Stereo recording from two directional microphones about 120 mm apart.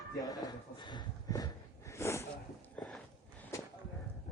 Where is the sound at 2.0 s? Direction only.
25° left (ahead or behind).